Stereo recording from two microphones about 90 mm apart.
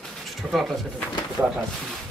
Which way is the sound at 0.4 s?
Centre (ahead or behind).